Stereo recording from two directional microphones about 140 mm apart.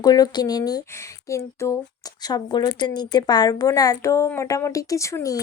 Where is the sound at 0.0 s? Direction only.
30° left (ahead or behind).